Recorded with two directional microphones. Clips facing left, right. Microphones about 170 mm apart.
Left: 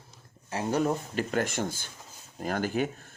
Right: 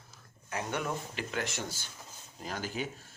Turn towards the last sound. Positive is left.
turn(degrees=55)  # may be behind; listen again after turning